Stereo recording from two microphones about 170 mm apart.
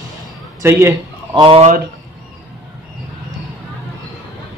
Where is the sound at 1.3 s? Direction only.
25° right (ahead or behind).